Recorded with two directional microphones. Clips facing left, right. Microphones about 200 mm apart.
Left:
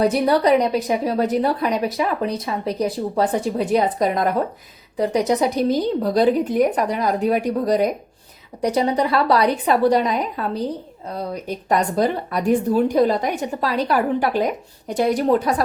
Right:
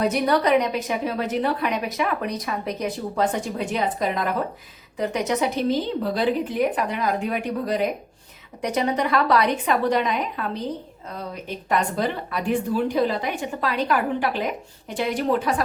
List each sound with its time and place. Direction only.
0.0 s speech: 30° left (ahead or behind)